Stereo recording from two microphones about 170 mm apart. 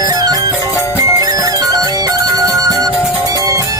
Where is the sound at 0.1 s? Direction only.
20° right (ahead or behind).